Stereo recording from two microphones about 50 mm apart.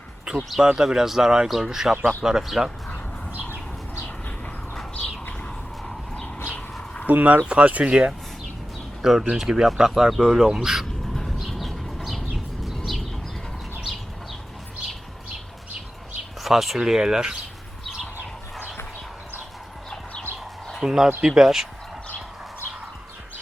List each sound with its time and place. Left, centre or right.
0.3 s speech: centre
7.1 s speech: right
7.4 s speech: right
9.0 s speech: centre
11.1 s bird: centre
11.3 s a sound: centre
16.4 s speech: centre
20.8 s speech: centre